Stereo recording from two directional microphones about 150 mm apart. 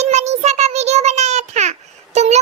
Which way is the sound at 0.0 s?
50° right (ahead or behind).